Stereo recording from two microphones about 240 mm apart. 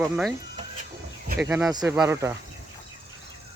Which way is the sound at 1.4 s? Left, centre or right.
Centre.